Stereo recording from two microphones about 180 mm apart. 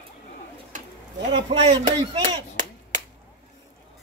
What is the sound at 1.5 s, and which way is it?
Speech, 35° right (ahead or behind).